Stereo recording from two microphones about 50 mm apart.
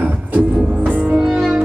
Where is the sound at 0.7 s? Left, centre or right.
Right.